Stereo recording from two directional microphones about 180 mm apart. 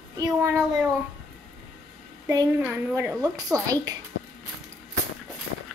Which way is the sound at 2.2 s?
20° right (ahead or behind).